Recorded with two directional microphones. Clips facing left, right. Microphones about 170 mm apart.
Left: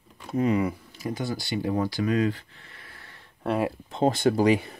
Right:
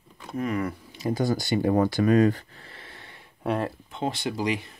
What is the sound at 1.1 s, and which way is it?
Speech, 40° right (ahead or behind).